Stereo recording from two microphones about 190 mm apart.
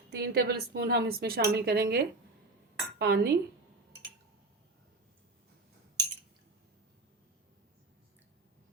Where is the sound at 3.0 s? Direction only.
55° right (ahead or behind).